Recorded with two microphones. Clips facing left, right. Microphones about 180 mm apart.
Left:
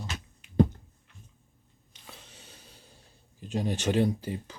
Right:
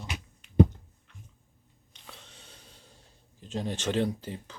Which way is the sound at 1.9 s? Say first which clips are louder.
Left 1 dB; 5° left (ahead or behind).